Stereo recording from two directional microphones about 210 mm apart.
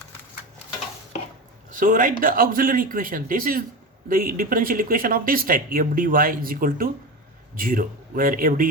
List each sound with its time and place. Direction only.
1.7 s speech: 40° right (ahead or behind)